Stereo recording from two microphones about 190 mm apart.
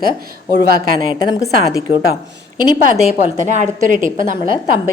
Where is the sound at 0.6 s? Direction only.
50° right (ahead or behind).